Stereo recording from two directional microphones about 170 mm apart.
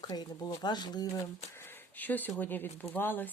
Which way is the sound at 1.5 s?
15° left (ahead or behind).